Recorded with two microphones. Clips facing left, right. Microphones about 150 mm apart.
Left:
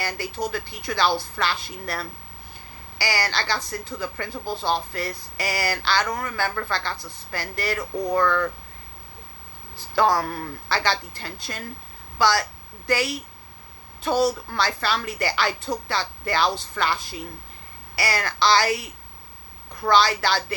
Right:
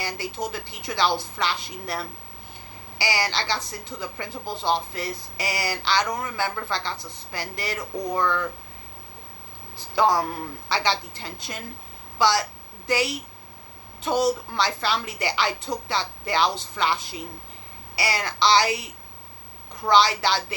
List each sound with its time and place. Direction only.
0.0 s a woman's voice: 20° right (ahead or behind)
9.7 s a woman's voice: 20° right (ahead or behind)